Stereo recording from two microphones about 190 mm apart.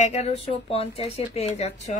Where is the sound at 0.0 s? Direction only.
35° left (ahead or behind).